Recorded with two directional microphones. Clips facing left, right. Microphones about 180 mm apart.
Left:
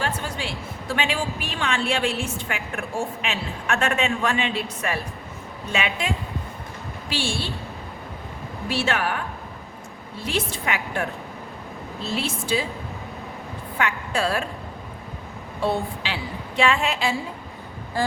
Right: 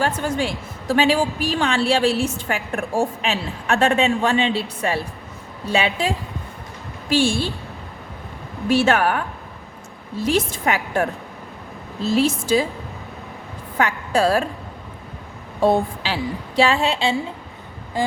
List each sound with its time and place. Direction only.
0.0 s a woman's voice: 40° right (ahead or behind)
7.1 s a woman's voice: 45° right (ahead or behind)
8.7 s a woman's voice: 45° right (ahead or behind)
10.2 s a woman's voice: 40° right (ahead or behind)
13.7 s a woman's voice: 40° right (ahead or behind)
15.6 s a woman's voice: 40° right (ahead or behind)
18.0 s vehicle: 15° right (ahead or behind)